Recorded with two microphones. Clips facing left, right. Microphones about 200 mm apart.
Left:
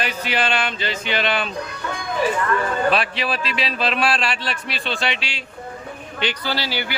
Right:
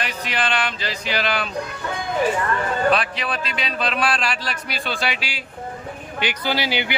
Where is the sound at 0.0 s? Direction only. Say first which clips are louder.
Left 2 dB; 30° left (ahead or behind).